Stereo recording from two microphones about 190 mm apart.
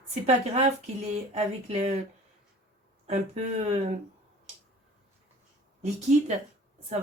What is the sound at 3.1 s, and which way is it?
Speech, 35° right (ahead or behind).